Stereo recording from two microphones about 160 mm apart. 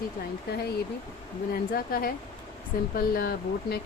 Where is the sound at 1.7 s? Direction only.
65° left (ahead or behind).